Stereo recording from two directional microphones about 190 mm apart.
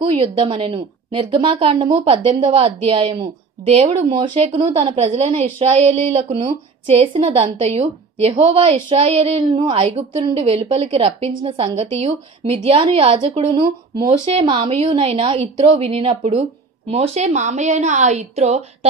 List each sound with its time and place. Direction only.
0.0 s a woman's voice: 30° right (ahead or behind)